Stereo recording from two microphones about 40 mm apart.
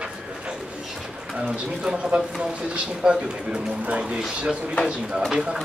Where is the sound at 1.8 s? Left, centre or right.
Right.